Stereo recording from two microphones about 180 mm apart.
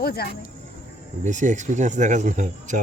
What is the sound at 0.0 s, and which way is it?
Speech, 55° left (ahead or behind).